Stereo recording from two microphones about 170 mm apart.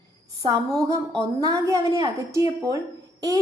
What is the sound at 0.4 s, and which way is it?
A woman's voice, 20° right (ahead or behind).